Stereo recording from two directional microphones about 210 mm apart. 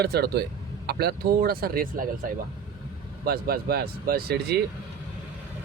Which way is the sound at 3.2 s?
45° right (ahead or behind).